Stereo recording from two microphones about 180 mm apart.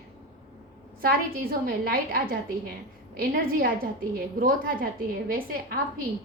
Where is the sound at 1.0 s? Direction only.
55° right (ahead or behind).